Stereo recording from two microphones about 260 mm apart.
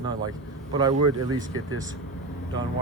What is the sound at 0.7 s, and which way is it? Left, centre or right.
Speech, centre.